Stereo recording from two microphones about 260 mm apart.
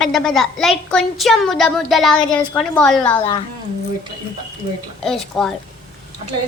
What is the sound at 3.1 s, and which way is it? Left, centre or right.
Speech, centre.